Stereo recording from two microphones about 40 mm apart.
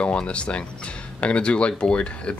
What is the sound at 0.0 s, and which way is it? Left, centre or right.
Speech, left.